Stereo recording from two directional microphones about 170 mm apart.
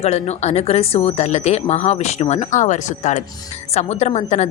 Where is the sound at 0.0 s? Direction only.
40° left (ahead or behind).